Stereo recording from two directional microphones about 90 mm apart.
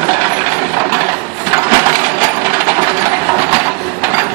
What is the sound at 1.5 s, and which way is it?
Crushing, 45° right (ahead or behind).